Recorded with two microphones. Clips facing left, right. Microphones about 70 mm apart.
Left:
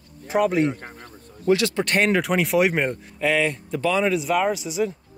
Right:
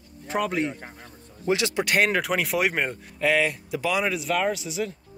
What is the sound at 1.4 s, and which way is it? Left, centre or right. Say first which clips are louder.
Speech: left 5 dB; centre.